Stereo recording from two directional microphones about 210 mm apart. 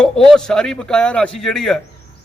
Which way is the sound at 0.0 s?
5° left (ahead or behind).